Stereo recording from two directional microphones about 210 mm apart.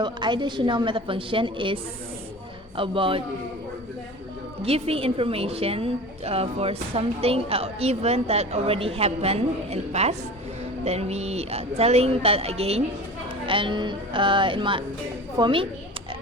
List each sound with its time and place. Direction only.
0.0 s a woman's voice: 20° right (ahead or behind)
4.6 s a woman's voice: 30° right (ahead or behind)